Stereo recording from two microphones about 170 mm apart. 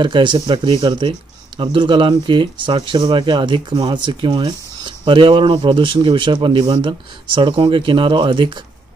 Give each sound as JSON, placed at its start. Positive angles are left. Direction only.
{"t": 0.0, "sound": "speech", "side_deg": -25}